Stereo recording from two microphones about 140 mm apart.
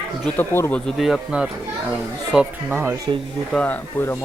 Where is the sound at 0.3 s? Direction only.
15° left (ahead or behind).